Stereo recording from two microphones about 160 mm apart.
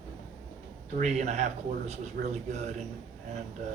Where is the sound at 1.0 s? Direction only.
45° right (ahead or behind).